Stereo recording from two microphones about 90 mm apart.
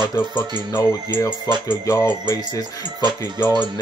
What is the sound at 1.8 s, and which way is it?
Music, 35° left (ahead or behind).